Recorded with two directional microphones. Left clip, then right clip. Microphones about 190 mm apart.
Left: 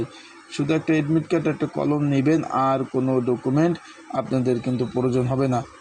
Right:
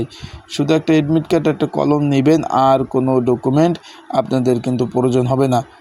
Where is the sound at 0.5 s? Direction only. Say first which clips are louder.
Right 7 dB; 25° right (ahead or behind).